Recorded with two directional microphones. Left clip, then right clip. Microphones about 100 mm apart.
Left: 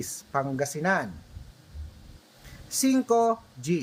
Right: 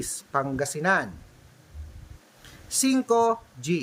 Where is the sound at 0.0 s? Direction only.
20° right (ahead or behind).